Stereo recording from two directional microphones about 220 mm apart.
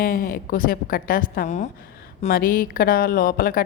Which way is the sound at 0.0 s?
40° left (ahead or behind).